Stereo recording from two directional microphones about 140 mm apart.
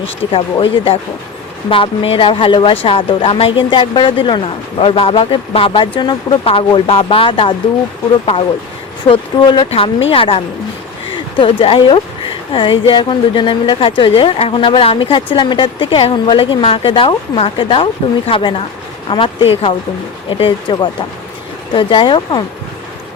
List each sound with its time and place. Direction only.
0.3 s speech: 40° left (ahead or behind)
9.0 s speech: 35° left (ahead or behind)